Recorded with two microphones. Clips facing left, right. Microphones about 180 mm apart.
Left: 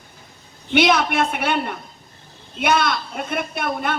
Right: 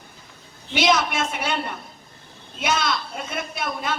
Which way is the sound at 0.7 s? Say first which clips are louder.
Left 4 dB; 60° left (ahead or behind).